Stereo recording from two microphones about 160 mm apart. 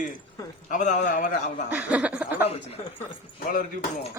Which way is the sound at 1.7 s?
10° right (ahead or behind).